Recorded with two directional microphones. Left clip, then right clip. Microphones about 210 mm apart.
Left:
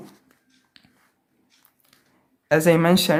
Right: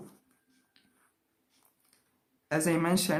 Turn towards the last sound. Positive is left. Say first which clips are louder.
# left 11 dB
turn(degrees=50)  # may be behind; listen again after turning